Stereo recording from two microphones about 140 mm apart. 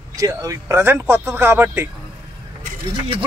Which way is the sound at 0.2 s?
25° right (ahead or behind).